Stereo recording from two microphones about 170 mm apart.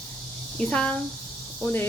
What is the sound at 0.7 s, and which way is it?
Speech, 5° left (ahead or behind).